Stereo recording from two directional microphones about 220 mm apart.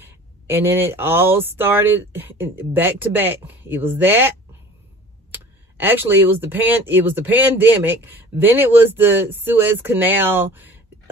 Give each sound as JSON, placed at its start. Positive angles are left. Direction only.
{"t": 0.0, "sound": "speech", "side_deg": -10}
{"t": 5.3, "sound": "speech", "side_deg": -10}